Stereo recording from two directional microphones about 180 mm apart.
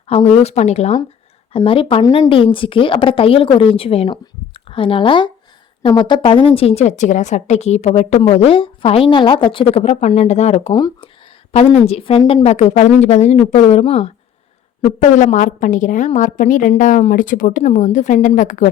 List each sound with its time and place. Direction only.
0.1 s a woman's voice: 35° left (ahead or behind)